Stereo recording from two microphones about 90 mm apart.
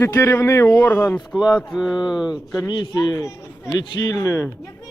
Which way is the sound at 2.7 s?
50° left (ahead or behind).